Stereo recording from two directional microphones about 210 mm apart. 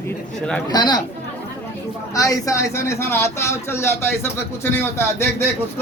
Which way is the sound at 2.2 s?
15° left (ahead or behind).